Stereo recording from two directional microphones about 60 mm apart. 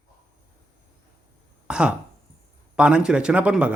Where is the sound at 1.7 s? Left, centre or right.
Centre.